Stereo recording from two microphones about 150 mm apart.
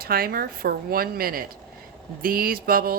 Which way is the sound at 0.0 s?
90° right.